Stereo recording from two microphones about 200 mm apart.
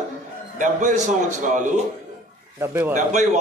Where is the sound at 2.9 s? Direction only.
35° right (ahead or behind).